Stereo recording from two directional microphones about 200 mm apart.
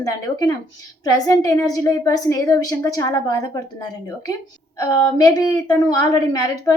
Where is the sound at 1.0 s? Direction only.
15° left (ahead or behind).